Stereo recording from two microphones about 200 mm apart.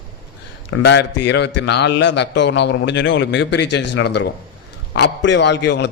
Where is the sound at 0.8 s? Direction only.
60° left (ahead or behind).